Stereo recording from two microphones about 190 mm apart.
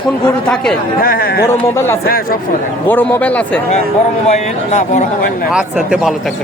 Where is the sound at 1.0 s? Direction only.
50° left (ahead or behind).